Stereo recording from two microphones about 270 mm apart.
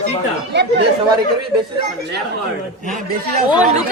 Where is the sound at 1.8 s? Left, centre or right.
Right.